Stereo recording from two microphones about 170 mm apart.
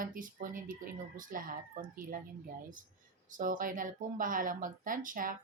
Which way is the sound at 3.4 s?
55° right (ahead or behind).